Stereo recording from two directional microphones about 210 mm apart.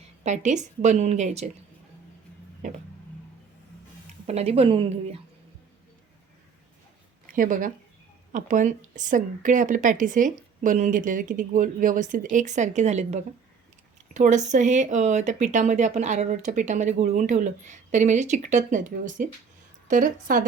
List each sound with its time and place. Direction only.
0.3 s a woman's voice: 35° right (ahead or behind)
4.3 s a woman's voice: 30° right (ahead or behind)
7.3 s a woman's voice: 40° right (ahead or behind)